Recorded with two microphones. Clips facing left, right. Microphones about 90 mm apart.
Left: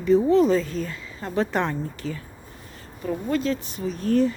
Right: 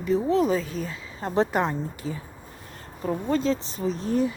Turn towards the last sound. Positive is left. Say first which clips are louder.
# left 4 dB
turn(degrees=-15)  # may be behind; listen again after turning